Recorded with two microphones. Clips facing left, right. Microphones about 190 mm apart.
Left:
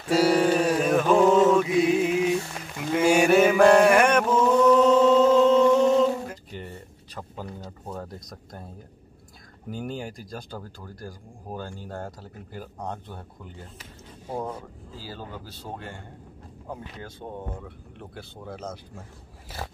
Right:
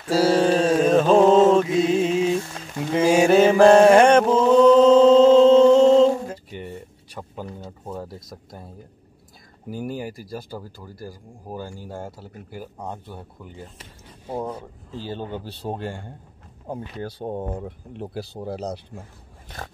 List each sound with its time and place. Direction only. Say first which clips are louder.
0.1 s mantra: right 2 dB; 25° right (ahead or behind)
7.2 s a sound: right 2 dB; 10° right (ahead or behind)
9.7 s speech: right 3 dB; 10° right (ahead or behind)
15.0 s a man's voice: right 8 dB; 25° right (ahead or behind)
19.5 s dog: left 1 dB; 5° left (ahead or behind)